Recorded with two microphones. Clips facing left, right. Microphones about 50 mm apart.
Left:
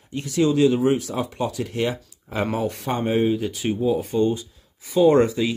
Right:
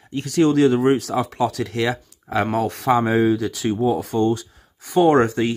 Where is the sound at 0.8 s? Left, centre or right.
Right.